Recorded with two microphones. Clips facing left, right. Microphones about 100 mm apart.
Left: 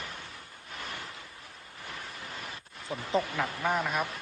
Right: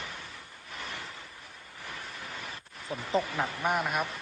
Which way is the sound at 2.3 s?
Centre (ahead or behind).